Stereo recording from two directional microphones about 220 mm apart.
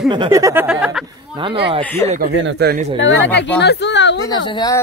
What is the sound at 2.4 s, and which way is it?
Speech, 50° right (ahead or behind).